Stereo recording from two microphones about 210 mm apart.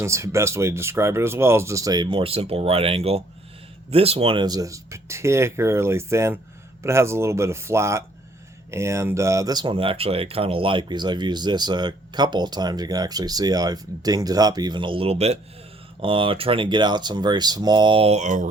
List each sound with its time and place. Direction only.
0.0 s speech: 15° right (ahead or behind); by 18.4 s 35° right (ahead or behind)